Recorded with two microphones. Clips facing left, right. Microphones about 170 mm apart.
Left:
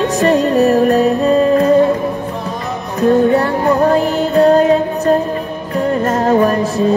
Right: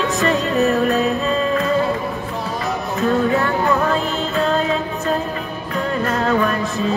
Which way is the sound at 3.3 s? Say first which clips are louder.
Left 5 dB; 35° left (ahead or behind).